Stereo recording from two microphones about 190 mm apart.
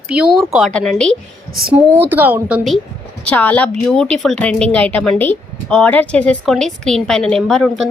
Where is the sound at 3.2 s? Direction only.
10° left (ahead or behind).